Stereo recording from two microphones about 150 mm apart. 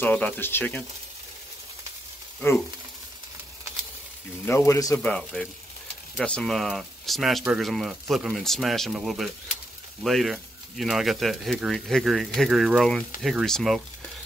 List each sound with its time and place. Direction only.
0.0 s speech: 10° left (ahead or behind)
4.5 s speech: 20° left (ahead or behind)
4.9 s speech: 10° left (ahead or behind)